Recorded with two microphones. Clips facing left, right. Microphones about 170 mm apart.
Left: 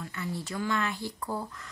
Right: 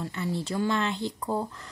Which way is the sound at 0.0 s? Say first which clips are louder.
Right 5 dB; 25° right (ahead or behind).